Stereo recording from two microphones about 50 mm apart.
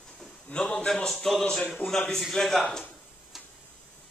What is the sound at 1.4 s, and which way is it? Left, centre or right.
Speech, left.